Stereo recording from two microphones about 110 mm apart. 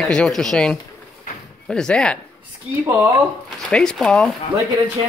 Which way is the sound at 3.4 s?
5° left (ahead or behind).